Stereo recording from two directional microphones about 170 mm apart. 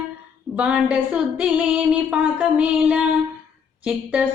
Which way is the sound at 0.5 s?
5° right (ahead or behind).